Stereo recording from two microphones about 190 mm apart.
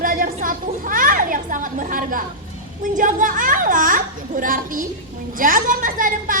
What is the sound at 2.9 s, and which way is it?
A child's voice, 45° right (ahead or behind).